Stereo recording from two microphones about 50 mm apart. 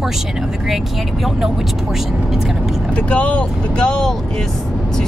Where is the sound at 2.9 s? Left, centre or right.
Left.